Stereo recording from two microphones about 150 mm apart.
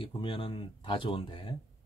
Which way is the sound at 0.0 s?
35° left (ahead or behind).